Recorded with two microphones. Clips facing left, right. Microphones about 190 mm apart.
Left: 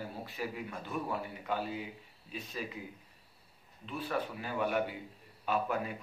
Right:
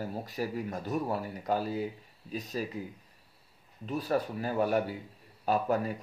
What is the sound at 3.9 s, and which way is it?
Speech, 40° right (ahead or behind).